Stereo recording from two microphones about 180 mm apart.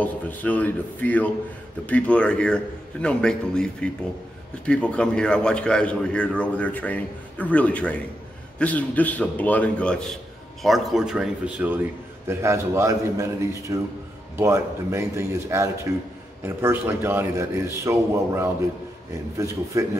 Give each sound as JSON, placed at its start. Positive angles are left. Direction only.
{"t": 0.0, "sound": "a man's voice", "side_deg": 10}